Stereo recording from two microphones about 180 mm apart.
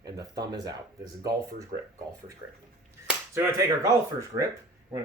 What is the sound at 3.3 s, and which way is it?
Speech, 15° right (ahead or behind).